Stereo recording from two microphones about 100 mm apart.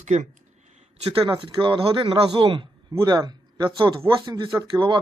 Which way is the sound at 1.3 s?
60° right (ahead or behind).